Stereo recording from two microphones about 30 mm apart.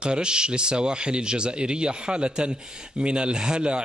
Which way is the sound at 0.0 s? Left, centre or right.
Right.